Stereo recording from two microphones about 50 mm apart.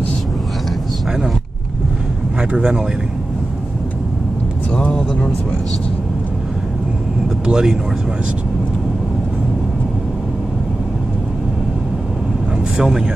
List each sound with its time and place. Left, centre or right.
2.5 s speech: centre
4.7 s a sound: centre
7.4 s speech: centre
12.7 s speech: centre